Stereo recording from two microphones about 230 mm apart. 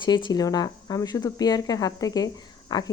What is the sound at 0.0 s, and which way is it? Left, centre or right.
Speech, centre.